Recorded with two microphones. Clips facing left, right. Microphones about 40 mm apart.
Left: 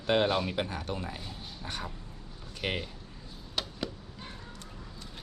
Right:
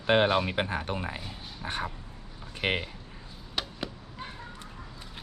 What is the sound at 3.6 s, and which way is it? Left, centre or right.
Chop, centre.